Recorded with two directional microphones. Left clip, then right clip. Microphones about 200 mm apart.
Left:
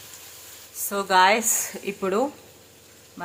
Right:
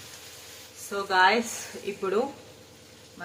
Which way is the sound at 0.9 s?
50° left (ahead or behind).